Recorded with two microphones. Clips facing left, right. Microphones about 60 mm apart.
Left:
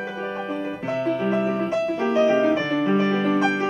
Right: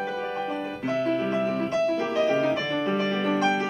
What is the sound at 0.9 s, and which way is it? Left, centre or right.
Music, left.